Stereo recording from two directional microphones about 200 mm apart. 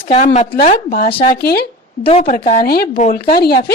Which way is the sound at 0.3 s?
40° left (ahead or behind).